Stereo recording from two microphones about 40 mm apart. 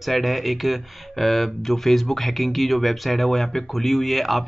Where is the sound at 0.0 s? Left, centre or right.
Centre.